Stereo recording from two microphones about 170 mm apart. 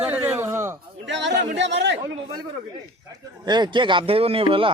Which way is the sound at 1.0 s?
90° right.